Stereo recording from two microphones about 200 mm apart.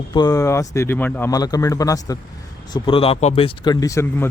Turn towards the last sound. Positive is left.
turn(degrees=15)  # may be behind; listen again after turning